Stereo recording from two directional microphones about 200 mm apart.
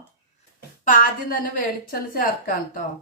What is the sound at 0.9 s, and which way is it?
A woman's voice, 40° left (ahead or behind).